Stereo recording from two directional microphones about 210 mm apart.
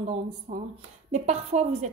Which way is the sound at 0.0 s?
30° right (ahead or behind).